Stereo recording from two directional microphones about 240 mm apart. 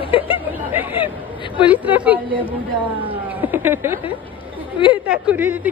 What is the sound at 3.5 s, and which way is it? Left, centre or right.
Speech, centre.